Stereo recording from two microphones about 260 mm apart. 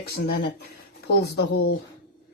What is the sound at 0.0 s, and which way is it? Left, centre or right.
Speech, left.